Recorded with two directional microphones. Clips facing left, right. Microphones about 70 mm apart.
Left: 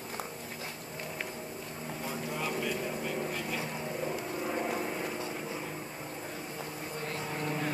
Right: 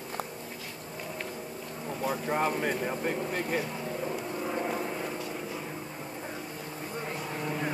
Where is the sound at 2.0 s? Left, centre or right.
Right.